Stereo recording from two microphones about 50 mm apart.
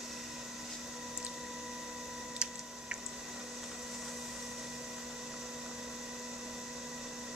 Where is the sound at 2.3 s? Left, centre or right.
Centre.